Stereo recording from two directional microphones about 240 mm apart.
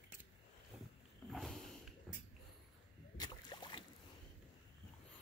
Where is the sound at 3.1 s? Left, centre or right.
Centre.